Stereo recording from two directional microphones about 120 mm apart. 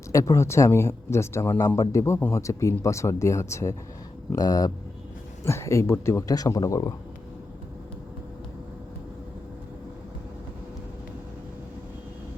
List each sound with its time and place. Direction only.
0.1 s speech: 25° left (ahead or behind)